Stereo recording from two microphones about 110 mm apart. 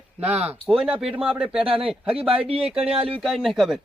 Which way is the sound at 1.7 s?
55° right (ahead or behind).